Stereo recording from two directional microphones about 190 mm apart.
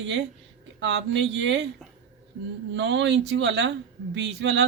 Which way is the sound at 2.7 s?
70° right (ahead or behind).